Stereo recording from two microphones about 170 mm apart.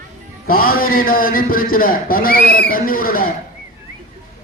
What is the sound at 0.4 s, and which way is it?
A man's voice, 60° left (ahead or behind).